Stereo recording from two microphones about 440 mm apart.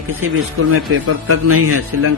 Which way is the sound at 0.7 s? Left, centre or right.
Right.